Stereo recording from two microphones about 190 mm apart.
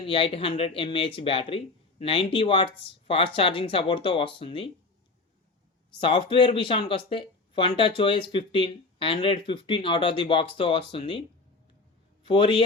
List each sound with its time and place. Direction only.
0.0 s speech: 30° left (ahead or behind)
6.0 s speech: 25° left (ahead or behind)
12.2 s a man's voice: 25° left (ahead or behind)